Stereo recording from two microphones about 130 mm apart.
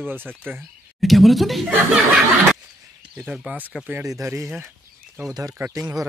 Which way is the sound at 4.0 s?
25° right (ahead or behind).